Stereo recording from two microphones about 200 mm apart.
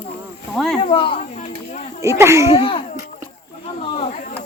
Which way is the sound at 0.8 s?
25° left (ahead or behind).